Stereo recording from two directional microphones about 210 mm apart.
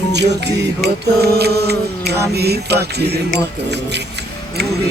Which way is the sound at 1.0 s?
50° right (ahead or behind).